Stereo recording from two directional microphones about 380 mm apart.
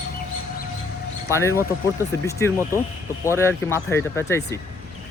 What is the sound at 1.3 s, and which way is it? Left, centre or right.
Speech, centre.